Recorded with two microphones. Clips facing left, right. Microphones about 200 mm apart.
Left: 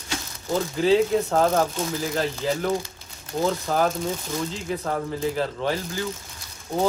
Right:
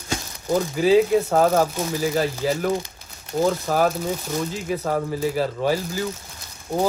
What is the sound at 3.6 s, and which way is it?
Speech, 5° right (ahead or behind).